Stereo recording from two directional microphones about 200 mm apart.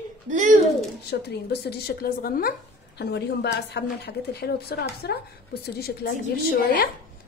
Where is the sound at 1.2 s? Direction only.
55° left (ahead or behind).